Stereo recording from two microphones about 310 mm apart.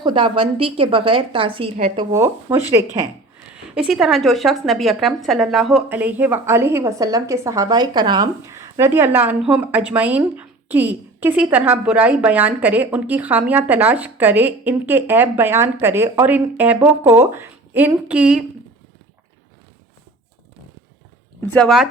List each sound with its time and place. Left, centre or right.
0.0 s a woman's voice: centre
2.1 s a woman's voice: centre
21.5 s a woman's voice: centre